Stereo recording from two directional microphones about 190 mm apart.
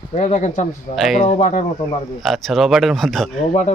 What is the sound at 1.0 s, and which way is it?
Speech, centre (ahead or behind).